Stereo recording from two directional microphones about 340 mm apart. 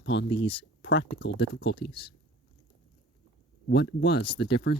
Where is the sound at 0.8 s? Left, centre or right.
Left.